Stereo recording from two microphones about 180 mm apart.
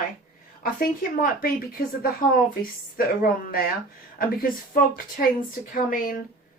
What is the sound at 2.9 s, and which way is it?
Speech, 55° left (ahead or behind).